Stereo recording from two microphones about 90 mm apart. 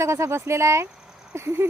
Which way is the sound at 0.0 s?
30° right (ahead or behind).